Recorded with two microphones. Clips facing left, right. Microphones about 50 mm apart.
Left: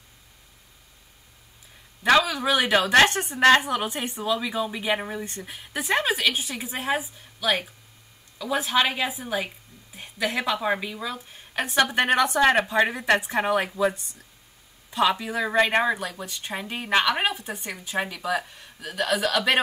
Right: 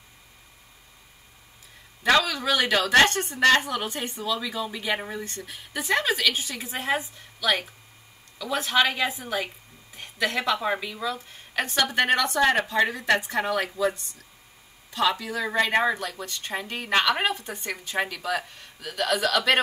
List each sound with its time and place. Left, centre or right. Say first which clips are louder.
2.0 s a woman's voice: left 2 dB; centre
14.9 s a woman's voice: left 2 dB; left